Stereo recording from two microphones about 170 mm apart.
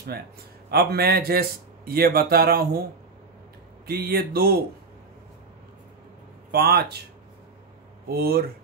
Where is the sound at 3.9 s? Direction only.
65° right (ahead or behind).